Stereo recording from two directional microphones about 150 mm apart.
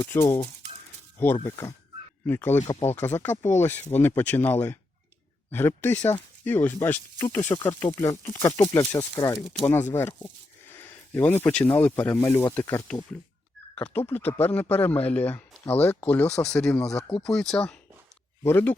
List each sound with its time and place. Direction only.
0.0 s speech: 20° left (ahead or behind)
1.5 s speech: 20° left (ahead or behind)
7.6 s speech: 30° left (ahead or behind)
10.7 s a sound: 15° left (ahead or behind)
11.8 s speech: 10° left (ahead or behind)